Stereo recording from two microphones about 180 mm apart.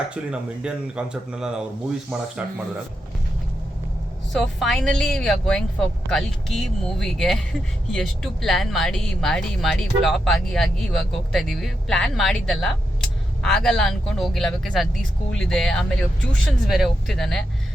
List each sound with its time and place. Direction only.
0.1 s speech: 5° right (ahead or behind)
4.3 s speech: centre (ahead or behind)